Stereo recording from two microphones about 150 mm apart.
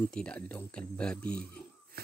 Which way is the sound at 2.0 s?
90° right.